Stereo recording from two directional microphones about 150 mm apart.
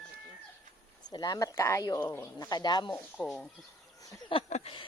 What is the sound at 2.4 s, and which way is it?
Speech, 30° left (ahead or behind).